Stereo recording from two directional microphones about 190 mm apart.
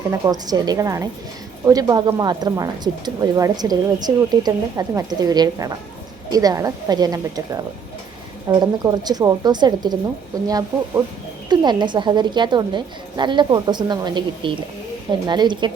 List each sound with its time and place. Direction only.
0.1 s speech: 20° right (ahead or behind)